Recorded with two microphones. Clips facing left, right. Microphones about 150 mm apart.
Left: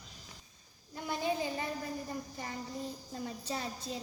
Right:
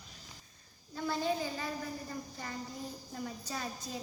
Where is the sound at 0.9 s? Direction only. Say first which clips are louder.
Right 1 dB; 15° left (ahead or behind).